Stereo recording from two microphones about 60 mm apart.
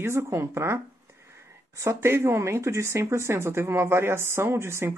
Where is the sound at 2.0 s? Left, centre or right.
Right.